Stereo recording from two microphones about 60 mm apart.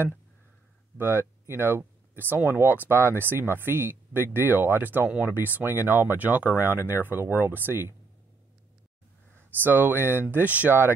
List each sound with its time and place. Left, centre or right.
0.9 s speech: right
9.6 s speech: right
10.3 s speech: right